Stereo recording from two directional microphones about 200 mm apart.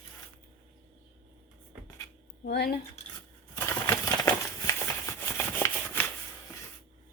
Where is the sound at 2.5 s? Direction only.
55° left (ahead or behind).